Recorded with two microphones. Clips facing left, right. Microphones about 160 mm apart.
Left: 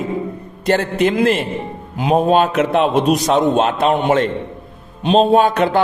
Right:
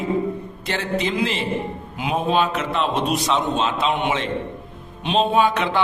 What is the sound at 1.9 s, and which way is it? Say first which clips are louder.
A man's voice: left 7 dB; 40° left (ahead or behind).